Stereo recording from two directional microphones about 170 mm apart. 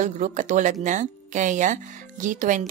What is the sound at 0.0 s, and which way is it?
Speech, 45° right (ahead or behind).